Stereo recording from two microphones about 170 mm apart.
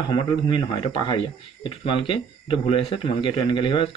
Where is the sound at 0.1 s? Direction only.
30° left (ahead or behind).